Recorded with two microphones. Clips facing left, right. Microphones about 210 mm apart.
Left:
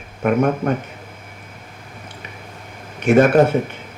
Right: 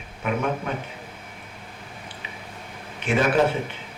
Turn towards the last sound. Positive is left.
turn(degrees=45)  # may be behind; listen again after turning